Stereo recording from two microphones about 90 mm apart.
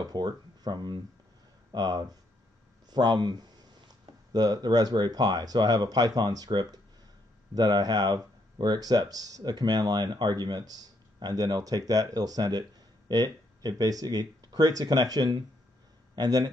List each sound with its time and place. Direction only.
0.0 s speech: 50° right (ahead or behind)